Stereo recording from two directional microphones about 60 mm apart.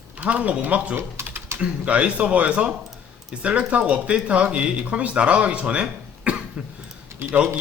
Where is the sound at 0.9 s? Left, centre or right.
Right.